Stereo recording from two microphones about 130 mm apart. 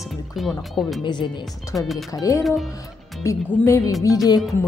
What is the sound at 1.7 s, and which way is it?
Speech, centre (ahead or behind).